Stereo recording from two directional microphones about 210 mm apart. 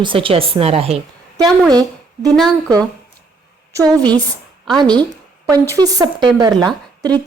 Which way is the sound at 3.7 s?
15° right (ahead or behind).